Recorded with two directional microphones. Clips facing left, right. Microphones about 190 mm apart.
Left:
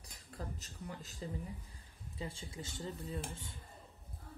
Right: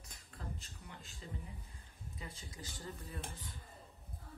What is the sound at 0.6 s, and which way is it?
Speech, 40° left (ahead or behind).